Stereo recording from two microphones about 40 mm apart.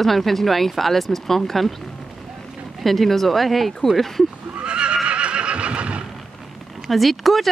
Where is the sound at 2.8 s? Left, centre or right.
Centre.